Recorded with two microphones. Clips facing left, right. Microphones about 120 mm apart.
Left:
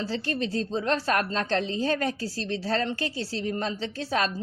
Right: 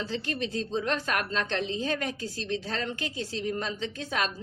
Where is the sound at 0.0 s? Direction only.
35° left (ahead or behind).